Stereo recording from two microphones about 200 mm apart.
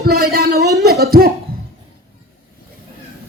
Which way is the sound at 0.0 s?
50° right (ahead or behind).